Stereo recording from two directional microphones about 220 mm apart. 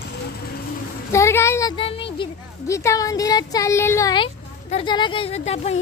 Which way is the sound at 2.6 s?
15° left (ahead or behind).